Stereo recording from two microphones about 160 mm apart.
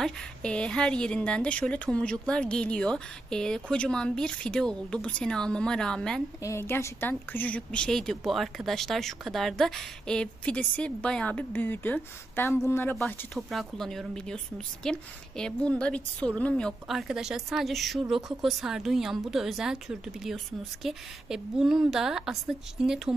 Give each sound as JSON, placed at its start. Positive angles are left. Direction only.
{"t": 0.0, "sound": "a woman's voice", "side_deg": 5}
{"t": 6.4, "sound": "a woman's voice", "side_deg": 15}
{"t": 13.0, "sound": "a woman's voice", "side_deg": 0}